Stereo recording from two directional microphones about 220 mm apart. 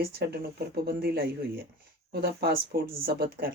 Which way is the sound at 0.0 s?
45° right (ahead or behind).